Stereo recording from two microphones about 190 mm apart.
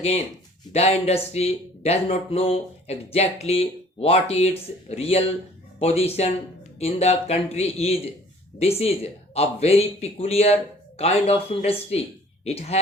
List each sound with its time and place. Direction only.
0.7 s speech: 35° left (ahead or behind)